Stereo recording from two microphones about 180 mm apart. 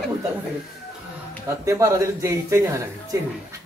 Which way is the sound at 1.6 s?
15° right (ahead or behind).